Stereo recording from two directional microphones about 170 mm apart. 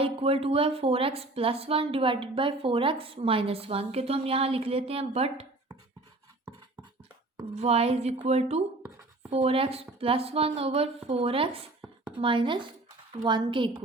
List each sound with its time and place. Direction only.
0.0 s a woman's voice: 35° right (ahead or behind)
7.5 s a woman's voice: 40° right (ahead or behind)